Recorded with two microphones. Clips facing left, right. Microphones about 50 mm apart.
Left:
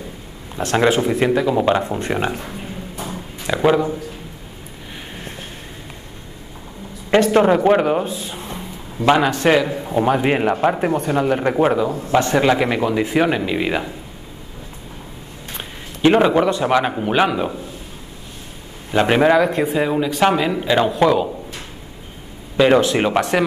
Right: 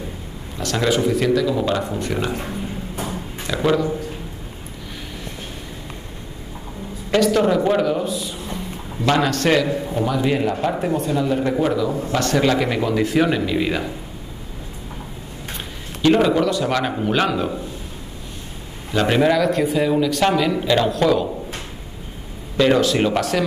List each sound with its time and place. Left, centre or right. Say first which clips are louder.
0.6 s speech: left 3 dB; left
3.4 s speech: left 3 dB; left
7.1 s speech: left 3 dB; left
9.0 s speech: left 3 dB; centre
10.0 s speech: left 3 dB; left
12.1 s speech: left 4 dB; left
16.0 s speech: left 2 dB; left
18.9 s speech: left 3 dB; left
22.6 s speech: left 2 dB; left